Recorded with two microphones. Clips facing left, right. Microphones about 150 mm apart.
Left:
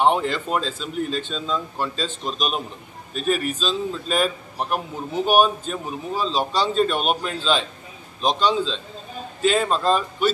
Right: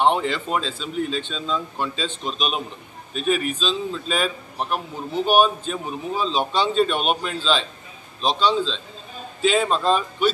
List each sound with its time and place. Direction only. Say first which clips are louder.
0.0 s a man's voice: even; 5° left (ahead or behind)